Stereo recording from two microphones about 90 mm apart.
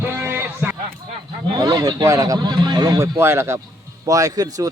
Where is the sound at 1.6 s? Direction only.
45° right (ahead or behind).